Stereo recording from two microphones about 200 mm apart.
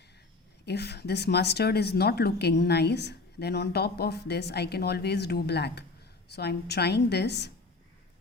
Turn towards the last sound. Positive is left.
turn(degrees=55)  # may be behind; listen again after turning